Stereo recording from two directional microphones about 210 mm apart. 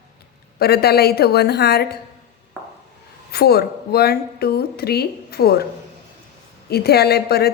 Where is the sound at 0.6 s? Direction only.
50° left (ahead or behind).